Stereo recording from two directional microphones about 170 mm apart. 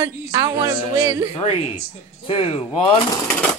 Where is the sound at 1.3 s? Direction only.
35° left (ahead or behind).